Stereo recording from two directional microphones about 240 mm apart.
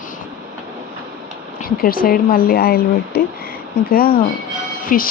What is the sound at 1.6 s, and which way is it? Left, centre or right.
Speech, left.